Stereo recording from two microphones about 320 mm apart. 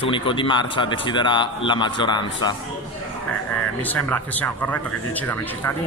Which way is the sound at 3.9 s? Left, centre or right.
Centre.